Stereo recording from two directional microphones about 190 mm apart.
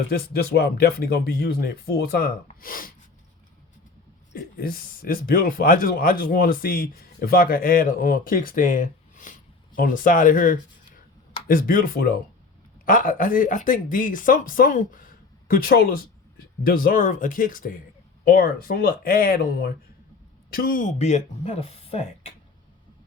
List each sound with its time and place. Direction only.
0.1 s speech: 55° left (ahead or behind)
4.4 s speech: 50° left (ahead or behind); by 22.3 s 35° left (ahead or behind)